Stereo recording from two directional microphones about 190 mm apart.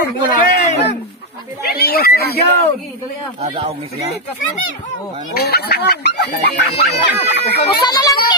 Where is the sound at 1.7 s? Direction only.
55° left (ahead or behind).